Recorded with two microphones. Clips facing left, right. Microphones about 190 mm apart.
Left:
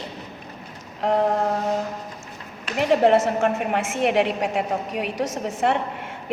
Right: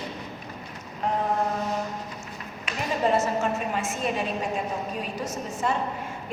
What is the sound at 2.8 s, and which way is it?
A woman's voice, 75° left (ahead or behind).